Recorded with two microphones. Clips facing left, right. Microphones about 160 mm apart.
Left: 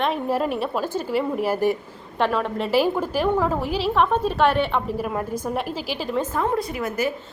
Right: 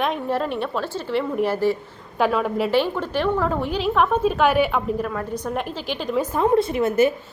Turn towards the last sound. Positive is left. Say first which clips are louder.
# right 6 dB
turn(degrees=-25)  # may be behind; listen again after turning